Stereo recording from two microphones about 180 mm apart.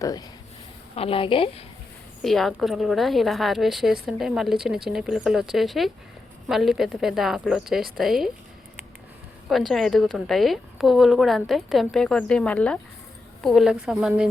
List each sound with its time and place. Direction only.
0.0 s a woman's voice: 20° left (ahead or behind)
0.9 s a woman's voice: 30° left (ahead or behind)
2.2 s a woman's voice: centre (ahead or behind)
9.5 s a woman's voice: centre (ahead or behind)